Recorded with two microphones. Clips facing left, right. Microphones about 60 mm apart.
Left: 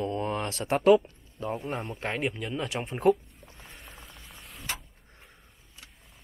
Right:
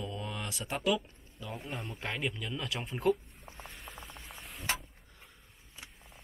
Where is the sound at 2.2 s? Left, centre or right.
Left.